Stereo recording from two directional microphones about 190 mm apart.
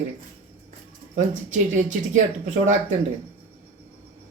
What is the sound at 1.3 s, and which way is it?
Speech, 40° right (ahead or behind).